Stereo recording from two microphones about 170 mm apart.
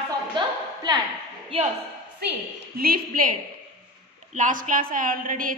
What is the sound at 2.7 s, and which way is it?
Speech, 60° right (ahead or behind).